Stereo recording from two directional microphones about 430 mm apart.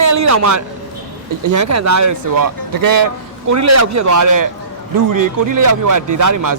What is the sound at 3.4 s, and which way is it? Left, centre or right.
A man's voice, right.